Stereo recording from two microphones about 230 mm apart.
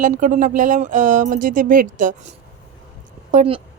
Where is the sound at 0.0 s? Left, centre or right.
Right.